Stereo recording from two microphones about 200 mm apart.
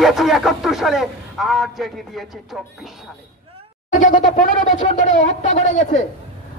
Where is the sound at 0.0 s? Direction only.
Centre (ahead or behind).